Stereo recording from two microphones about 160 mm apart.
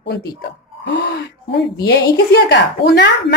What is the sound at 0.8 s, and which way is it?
A woman's voice, 90° left.